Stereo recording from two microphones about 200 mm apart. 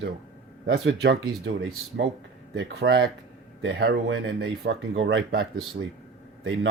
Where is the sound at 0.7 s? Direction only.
70° right (ahead or behind).